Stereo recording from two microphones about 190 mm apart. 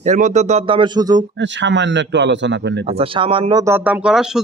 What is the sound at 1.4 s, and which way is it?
A man's voice, 70° right (ahead or behind).